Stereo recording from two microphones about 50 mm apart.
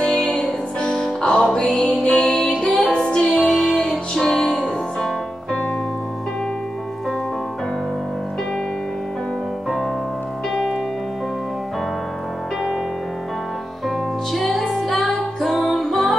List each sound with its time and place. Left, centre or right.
0.2 s music: centre
13.8 s music: centre